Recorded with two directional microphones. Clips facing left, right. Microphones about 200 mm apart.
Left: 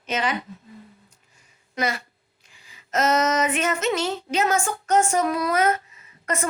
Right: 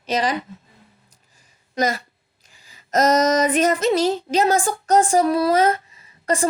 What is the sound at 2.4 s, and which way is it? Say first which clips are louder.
Female singing: right 1 dB; 40° right (ahead or behind).